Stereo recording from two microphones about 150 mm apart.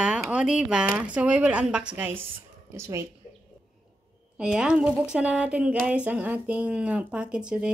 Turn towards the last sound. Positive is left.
turn(degrees=-5)  # may be behind; listen again after turning